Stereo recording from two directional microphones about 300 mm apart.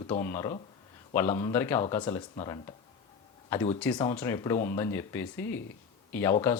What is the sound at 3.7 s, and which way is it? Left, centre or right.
Speech, centre.